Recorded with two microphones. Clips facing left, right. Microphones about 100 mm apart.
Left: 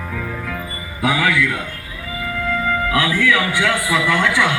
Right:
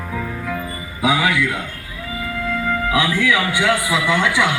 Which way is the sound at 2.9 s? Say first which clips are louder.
Even; 20° right (ahead or behind).